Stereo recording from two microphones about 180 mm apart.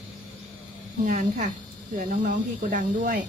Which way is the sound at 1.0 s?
45° right (ahead or behind).